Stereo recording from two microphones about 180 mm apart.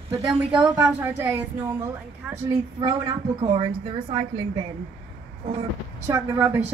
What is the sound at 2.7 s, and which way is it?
Speech, 25° right (ahead or behind).